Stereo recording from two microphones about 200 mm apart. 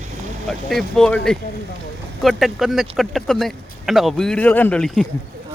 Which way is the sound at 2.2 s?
Centre (ahead or behind).